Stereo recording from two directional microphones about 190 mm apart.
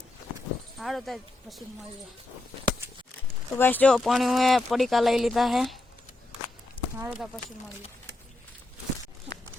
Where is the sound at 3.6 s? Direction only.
10° left (ahead or behind).